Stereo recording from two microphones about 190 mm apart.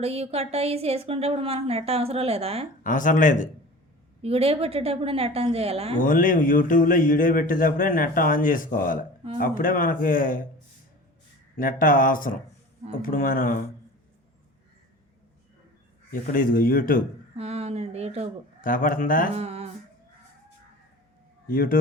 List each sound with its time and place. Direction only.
0.0 s a woman's voice: 30° right (ahead or behind)
2.8 s speech: 45° left (ahead or behind)
4.2 s a woman's voice: 30° right (ahead or behind)
6.0 s speech: 45° left (ahead or behind)
11.5 s speech: 45° left (ahead or behind)
16.2 s speech: 50° left (ahead or behind)
17.3 s speech: 35° right (ahead or behind)
18.6 s speech: 45° left (ahead or behind)
19.3 s a sound: 30° right (ahead or behind)
21.4 s a man's voice: 50° left (ahead or behind)